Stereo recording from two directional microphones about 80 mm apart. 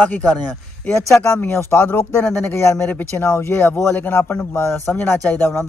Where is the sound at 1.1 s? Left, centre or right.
Left.